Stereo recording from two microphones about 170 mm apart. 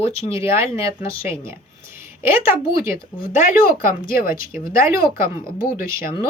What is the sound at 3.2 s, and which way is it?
Speech, 50° left (ahead or behind).